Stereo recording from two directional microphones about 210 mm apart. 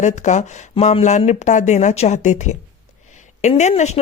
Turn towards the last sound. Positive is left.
turn(degrees=30)  # may be behind; listen again after turning